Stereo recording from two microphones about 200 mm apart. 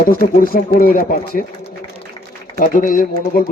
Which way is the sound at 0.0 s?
45° left (ahead or behind).